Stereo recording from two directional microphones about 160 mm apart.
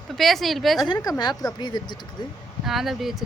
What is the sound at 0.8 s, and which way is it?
Speech, 20° left (ahead or behind).